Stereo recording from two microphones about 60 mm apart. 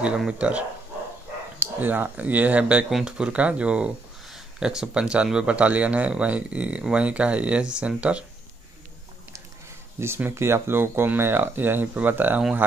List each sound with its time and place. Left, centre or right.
0.3 s speech: right
1.8 s speech: right
2.9 s speech: centre
3.2 s speech: centre
9.9 s speech: right